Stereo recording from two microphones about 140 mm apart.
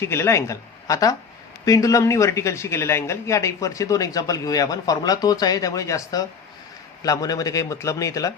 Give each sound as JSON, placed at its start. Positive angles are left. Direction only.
{"t": 0.0, "sound": "speech", "side_deg": 20}